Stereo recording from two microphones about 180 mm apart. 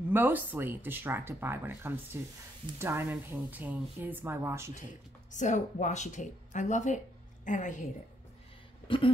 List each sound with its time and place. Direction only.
0.1 s speech: 10° right (ahead or behind)
5.3 s speech: 45° left (ahead or behind)
8.8 s a sound: 30° left (ahead or behind)